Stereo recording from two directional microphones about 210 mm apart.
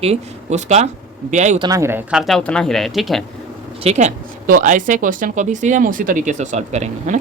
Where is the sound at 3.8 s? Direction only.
30° right (ahead or behind).